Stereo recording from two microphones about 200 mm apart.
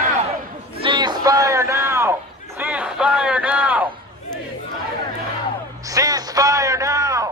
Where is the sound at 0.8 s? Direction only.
25° right (ahead or behind); by 3.8 s 10° right (ahead or behind).